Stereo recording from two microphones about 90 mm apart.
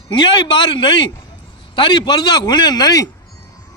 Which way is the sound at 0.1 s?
60° left (ahead or behind).